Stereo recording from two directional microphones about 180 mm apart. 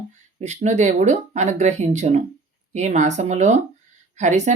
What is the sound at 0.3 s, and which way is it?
Speech, 40° right (ahead or behind).